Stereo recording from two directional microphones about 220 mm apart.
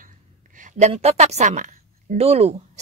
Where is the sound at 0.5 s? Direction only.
35° right (ahead or behind).